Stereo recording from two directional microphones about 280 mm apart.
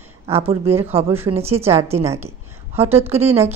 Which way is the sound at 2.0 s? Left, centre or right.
Centre.